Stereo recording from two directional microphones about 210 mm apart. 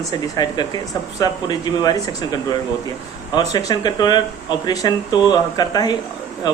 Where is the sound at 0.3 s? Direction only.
20° left (ahead or behind).